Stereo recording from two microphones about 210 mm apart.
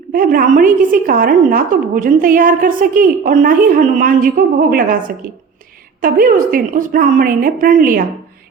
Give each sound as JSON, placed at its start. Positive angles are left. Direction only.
{"t": 0.1, "sound": "a woman's voice", "side_deg": -45}